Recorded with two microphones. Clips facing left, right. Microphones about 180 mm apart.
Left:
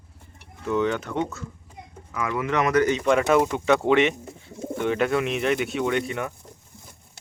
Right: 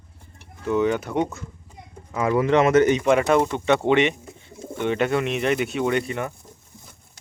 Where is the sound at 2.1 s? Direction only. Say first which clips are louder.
Right 6 dB; 30° right (ahead or behind).